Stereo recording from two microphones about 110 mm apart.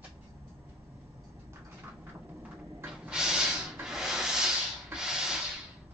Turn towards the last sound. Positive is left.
turn(degrees=-5)  # may be behind; listen again after turning